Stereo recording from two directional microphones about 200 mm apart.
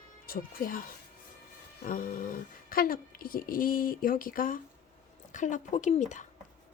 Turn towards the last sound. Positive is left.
turn(degrees=40)  # may be behind; listen again after turning